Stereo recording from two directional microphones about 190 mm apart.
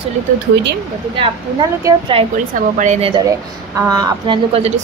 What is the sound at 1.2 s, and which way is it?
Speech, 25° right (ahead or behind).